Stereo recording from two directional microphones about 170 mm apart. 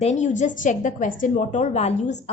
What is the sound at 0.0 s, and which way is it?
Speech, 40° left (ahead or behind).